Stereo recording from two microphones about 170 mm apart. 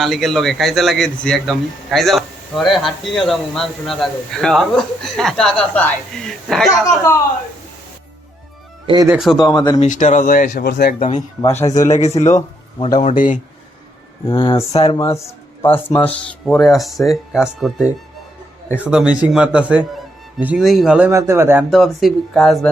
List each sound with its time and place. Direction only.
0.0 s speech: centre (ahead or behind)
6.7 s speech: 15° left (ahead or behind)
9.0 s speech: centre (ahead or behind)
9.4 s speech: 25° left (ahead or behind)
9.8 s speech: 45° left (ahead or behind)
10.7 s speech: 75° left (ahead or behind)
11.0 s speech: 40° left (ahead or behind)
14.3 s speech: 30° left (ahead or behind)
14.9 s speech: 15° left (ahead or behind); by 17.8 s centre (ahead or behind)
18.9 s speech: 5° right (ahead or behind)
21.1 s speech: 15° right (ahead or behind)
21.7 s speech: centre (ahead or behind)